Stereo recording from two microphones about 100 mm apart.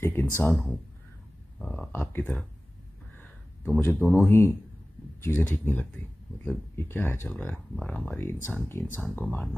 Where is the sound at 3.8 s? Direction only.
20° left (ahead or behind).